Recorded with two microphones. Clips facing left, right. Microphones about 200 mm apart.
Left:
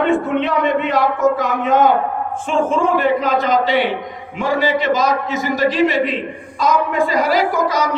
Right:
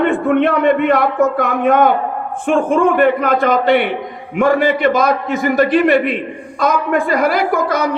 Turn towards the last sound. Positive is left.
turn(degrees=-55)  # may be behind; listen again after turning